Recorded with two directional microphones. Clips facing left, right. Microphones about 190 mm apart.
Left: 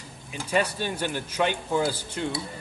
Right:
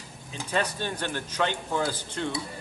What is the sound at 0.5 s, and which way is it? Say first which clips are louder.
A man's voice: left 3 dB; 10° left (ahead or behind).